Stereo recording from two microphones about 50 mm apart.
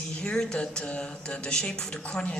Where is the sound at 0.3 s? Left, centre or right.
Centre.